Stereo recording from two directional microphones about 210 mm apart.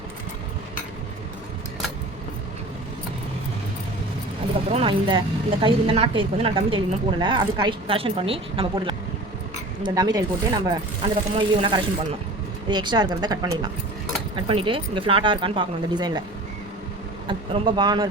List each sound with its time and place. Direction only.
4.7 s a woman's voice: 25° right (ahead or behind)
17.2 s a woman's voice: 20° right (ahead or behind)